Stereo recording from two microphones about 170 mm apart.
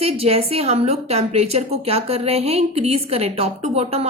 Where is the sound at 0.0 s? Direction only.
35° right (ahead or behind).